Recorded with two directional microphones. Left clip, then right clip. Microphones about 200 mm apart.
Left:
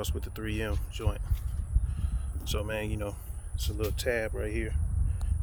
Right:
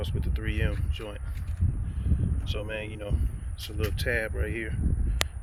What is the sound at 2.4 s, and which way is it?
Speech, 30° left (ahead or behind).